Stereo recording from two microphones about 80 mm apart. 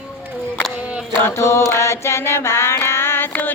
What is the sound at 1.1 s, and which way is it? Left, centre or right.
Mantra, left.